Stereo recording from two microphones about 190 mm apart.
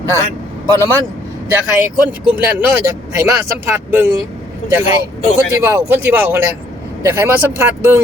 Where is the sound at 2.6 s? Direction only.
15° right (ahead or behind).